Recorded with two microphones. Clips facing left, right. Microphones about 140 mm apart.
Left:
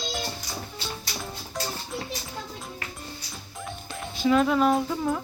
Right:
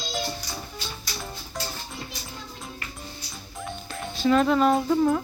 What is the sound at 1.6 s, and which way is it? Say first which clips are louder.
Music: left 2 dB; centre (ahead or behind).